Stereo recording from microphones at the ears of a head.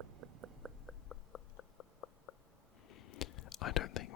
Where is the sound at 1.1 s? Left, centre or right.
Left.